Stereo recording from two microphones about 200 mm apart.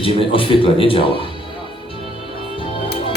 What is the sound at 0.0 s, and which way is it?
A man's voice, 25° left (ahead or behind).